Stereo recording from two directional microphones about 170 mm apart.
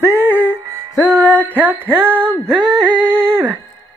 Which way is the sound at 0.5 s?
15° right (ahead or behind).